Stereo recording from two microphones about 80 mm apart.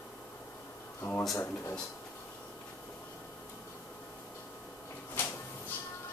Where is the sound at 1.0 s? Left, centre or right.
Centre.